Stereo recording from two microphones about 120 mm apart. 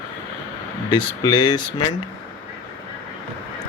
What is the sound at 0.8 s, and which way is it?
Speech, 40° left (ahead or behind).